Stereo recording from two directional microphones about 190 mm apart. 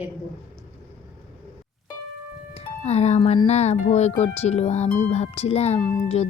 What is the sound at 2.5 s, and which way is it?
Music, 35° left (ahead or behind).